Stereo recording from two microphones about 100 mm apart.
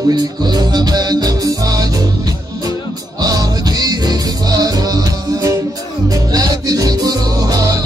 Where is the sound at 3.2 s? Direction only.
40° right (ahead or behind).